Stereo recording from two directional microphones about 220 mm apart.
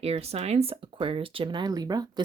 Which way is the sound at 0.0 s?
25° right (ahead or behind).